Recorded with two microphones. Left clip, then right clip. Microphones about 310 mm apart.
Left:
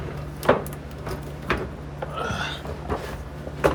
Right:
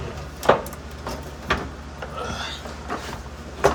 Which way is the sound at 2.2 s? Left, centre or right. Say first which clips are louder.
Left 2 dB; left.